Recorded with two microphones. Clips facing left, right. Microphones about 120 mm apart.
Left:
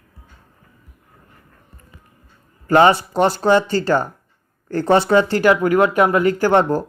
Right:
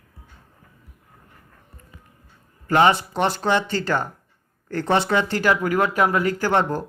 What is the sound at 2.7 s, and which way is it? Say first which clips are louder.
Speech: left 4 dB; 35° left (ahead or behind).